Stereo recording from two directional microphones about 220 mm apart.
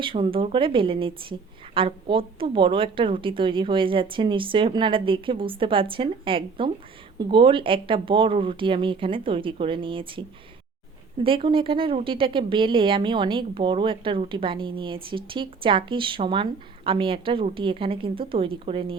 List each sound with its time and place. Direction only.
0.0 s speech: 25° right (ahead or behind)